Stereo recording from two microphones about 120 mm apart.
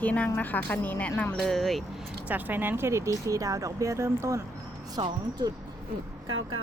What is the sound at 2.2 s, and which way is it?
Speech, 15° right (ahead or behind).